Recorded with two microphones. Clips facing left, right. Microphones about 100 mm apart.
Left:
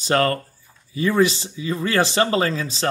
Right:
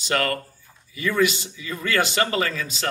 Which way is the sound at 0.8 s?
30° left (ahead or behind).